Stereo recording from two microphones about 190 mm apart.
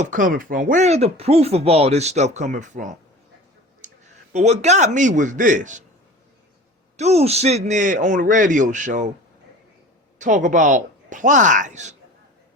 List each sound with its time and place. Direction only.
0.0 s a man's voice: 45° right (ahead or behind)
6.9 s speech: 35° right (ahead or behind)
10.2 s speech: 40° right (ahead or behind)